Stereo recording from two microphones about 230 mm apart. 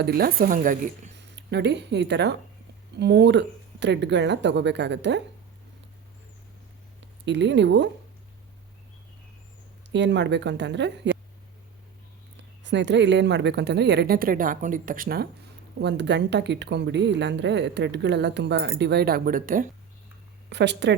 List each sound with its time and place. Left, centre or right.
0.0 s speech: right
1.4 s a woman's voice: right
7.3 s a woman's voice: right
9.9 s a woman's voice: right
12.4 s a woman's voice: right
20.5 s a woman's voice: right